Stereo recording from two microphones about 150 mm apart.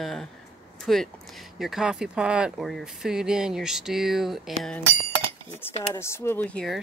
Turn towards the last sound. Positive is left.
turn(degrees=5)  # may be behind; listen again after turning